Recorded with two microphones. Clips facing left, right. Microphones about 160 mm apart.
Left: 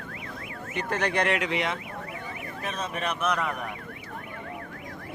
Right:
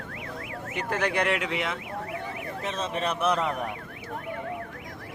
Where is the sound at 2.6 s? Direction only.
25° right (ahead or behind).